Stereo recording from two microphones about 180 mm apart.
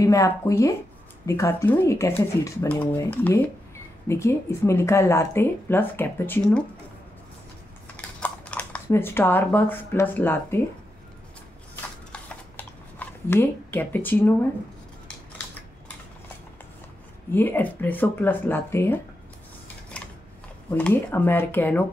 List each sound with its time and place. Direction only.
0.0 s speech: 15° left (ahead or behind)
7.9 s speech: 10° left (ahead or behind)
11.7 s shuffling cards: 10° left (ahead or behind)
17.3 s speech: 10° left (ahead or behind)
20.7 s speech: 10° left (ahead or behind)